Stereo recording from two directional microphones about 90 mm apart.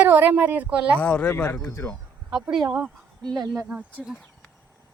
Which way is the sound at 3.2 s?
50° right (ahead or behind).